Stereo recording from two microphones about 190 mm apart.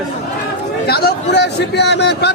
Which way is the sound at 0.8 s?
55° left (ahead or behind).